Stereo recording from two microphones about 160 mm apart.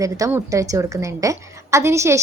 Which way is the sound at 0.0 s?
20° right (ahead or behind).